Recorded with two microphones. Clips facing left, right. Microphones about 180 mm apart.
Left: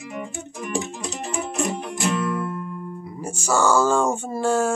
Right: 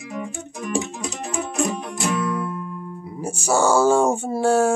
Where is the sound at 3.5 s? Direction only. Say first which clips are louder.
Right 2 dB; 10° right (ahead or behind).